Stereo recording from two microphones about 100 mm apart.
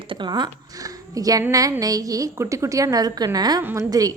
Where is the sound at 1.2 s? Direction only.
35° right (ahead or behind).